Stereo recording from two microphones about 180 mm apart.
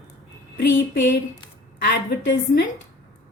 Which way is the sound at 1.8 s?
65° left (ahead or behind).